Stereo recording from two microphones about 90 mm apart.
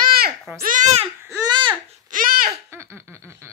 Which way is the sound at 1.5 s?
65° right (ahead or behind).